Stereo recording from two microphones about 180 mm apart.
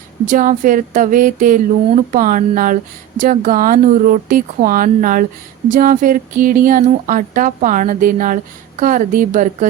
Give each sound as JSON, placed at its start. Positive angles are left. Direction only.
{"t": 0.3, "sound": "speech", "side_deg": -45}